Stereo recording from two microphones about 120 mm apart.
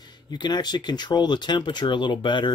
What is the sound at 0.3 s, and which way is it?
A man's voice, 35° left (ahead or behind).